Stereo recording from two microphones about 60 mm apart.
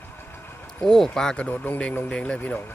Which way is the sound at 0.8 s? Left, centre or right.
Centre.